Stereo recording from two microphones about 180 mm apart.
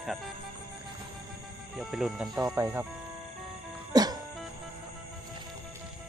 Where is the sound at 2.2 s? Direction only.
20° right (ahead or behind).